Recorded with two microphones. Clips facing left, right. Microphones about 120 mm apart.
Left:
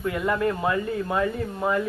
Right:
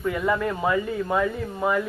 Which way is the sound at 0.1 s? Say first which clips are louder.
Even; centre (ahead or behind).